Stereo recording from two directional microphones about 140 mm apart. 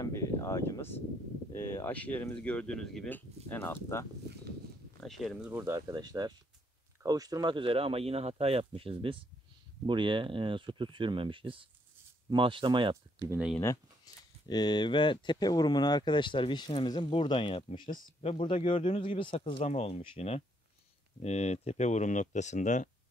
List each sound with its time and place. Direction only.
0.0 s a sound: 25° left (ahead or behind)
1.5 s speech: 20° left (ahead or behind)
5.0 s speech: centre (ahead or behind)
5.5 s speech: 20° right (ahead or behind); by 12.9 s 35° right (ahead or behind)
14.5 s speech: 30° left (ahead or behind)
19.6 s speech: 50° left (ahead or behind)